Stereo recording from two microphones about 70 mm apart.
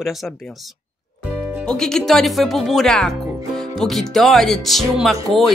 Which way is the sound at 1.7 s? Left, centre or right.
Centre.